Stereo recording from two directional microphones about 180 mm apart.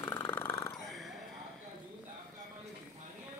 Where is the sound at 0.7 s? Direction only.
Centre (ahead or behind).